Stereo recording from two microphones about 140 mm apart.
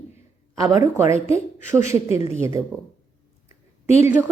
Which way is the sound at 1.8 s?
50° left (ahead or behind).